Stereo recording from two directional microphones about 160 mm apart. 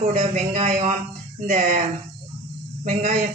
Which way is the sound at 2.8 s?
50° right (ahead or behind).